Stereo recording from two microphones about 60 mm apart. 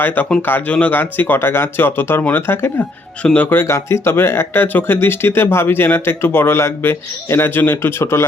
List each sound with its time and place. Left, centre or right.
0.0 s speech: left
0.9 s speech: left
3.7 s speech: left